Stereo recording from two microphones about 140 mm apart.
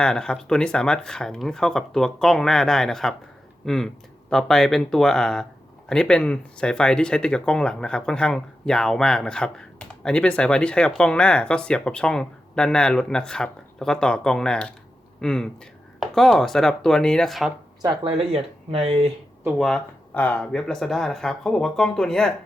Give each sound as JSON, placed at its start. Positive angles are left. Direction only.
{"t": 0.0, "sound": "speech", "side_deg": 5}
{"t": 17.8, "sound": "speech", "side_deg": -40}
{"t": 19.5, "sound": "speech", "side_deg": 5}